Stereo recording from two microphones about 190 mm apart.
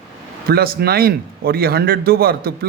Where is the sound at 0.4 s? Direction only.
55° right (ahead or behind).